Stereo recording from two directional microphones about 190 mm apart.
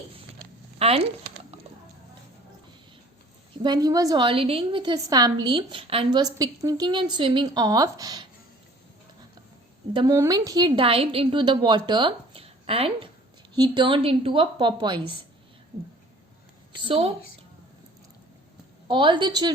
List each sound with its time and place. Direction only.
0.8 s speech: 30° right (ahead or behind)
3.6 s a woman's voice: 20° right (ahead or behind)
9.9 s a woman's voice: 20° right (ahead or behind)
16.7 s a woman's voice: 30° right (ahead or behind)
18.9 s a woman's voice: 25° right (ahead or behind)